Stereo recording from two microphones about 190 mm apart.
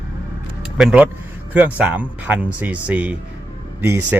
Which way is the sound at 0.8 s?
5° right (ahead or behind).